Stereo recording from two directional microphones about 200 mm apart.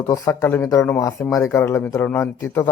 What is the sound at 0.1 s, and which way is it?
Speech, 10° left (ahead or behind).